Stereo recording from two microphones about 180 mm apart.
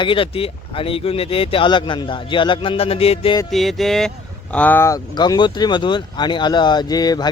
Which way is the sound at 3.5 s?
Centre (ahead or behind).